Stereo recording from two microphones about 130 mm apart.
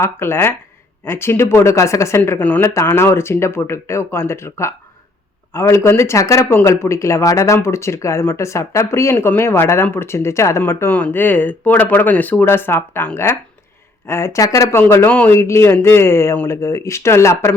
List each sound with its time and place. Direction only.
0.0 s speech: 20° left (ahead or behind)